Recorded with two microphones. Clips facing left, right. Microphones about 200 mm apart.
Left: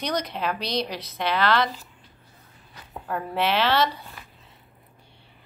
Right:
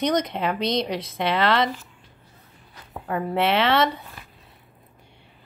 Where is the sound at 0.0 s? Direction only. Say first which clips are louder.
Right 5 dB; 25° right (ahead or behind).